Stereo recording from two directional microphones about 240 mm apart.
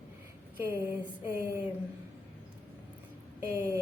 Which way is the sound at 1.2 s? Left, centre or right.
Centre.